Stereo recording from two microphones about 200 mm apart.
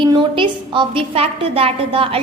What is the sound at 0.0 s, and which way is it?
A woman's voice, 25° right (ahead or behind).